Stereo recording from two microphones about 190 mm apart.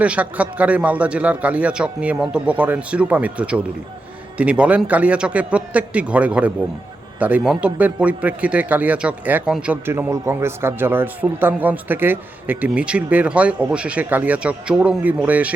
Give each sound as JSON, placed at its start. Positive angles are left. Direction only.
{"t": 0.0, "sound": "speech", "side_deg": -5}